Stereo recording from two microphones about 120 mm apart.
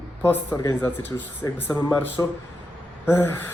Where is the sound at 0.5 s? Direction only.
25° left (ahead or behind).